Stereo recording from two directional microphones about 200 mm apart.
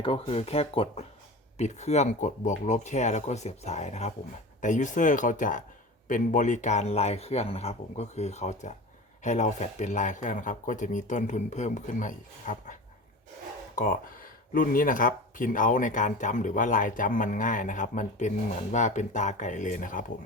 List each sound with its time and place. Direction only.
0.0 s speech: 30° left (ahead or behind)
13.7 s speech: 45° left (ahead or behind)